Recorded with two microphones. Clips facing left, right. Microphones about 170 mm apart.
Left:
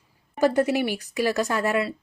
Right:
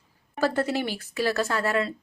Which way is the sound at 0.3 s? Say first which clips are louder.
Left 4 dB; 15° left (ahead or behind).